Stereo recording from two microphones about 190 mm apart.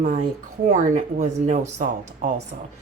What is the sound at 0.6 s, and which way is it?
A woman's voice, 40° right (ahead or behind).